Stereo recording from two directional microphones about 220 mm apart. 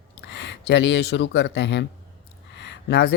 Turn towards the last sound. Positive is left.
turn(degrees=50)  # may be behind; listen again after turning